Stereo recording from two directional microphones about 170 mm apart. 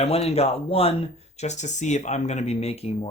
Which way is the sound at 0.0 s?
35° left (ahead or behind).